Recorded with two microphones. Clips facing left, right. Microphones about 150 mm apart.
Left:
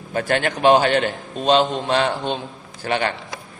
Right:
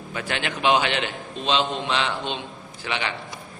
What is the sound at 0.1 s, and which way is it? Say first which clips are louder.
A man's voice: left 8 dB; 45° left (ahead or behind).